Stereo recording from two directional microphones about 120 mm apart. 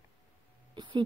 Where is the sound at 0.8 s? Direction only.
40° right (ahead or behind).